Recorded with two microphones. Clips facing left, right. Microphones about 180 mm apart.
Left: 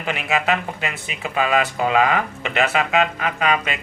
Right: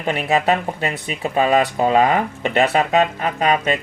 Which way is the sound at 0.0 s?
35° right (ahead or behind).